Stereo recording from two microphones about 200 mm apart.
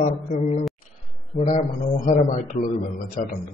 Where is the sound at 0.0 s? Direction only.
35° left (ahead or behind).